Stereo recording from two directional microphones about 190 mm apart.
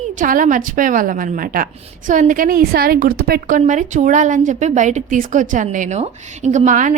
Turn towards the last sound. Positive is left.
turn(degrees=-40)  # may be behind; listen again after turning